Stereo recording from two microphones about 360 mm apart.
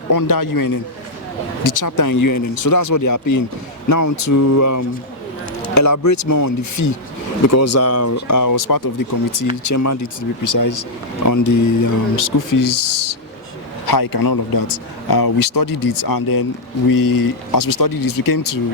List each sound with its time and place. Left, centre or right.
0.1 s a man's voice: left